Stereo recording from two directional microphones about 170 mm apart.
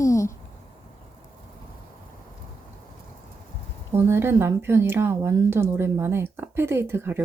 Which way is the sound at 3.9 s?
15° right (ahead or behind).